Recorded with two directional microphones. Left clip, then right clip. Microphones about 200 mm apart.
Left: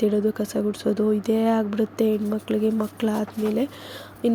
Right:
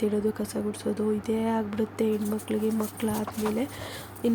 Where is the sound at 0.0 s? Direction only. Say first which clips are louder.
Left 5 dB; 20° left (ahead or behind).